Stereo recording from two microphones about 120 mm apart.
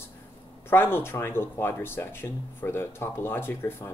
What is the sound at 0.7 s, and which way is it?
Speech, 20° left (ahead or behind).